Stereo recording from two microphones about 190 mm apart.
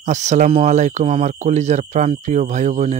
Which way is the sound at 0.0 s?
40° right (ahead or behind).